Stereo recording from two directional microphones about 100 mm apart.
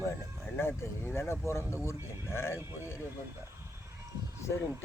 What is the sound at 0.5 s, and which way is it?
Speech, 25° left (ahead or behind).